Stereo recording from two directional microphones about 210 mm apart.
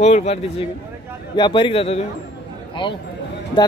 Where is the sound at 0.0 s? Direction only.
30° left (ahead or behind).